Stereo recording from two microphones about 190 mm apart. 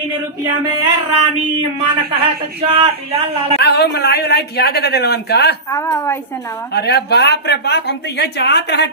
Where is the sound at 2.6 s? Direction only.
30° right (ahead or behind).